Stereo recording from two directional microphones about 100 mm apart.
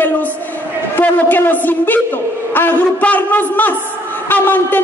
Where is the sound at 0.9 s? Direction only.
20° left (ahead or behind).